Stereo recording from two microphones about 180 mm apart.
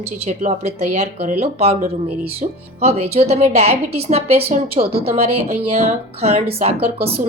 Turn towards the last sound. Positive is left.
turn(degrees=-35)  # may be behind; listen again after turning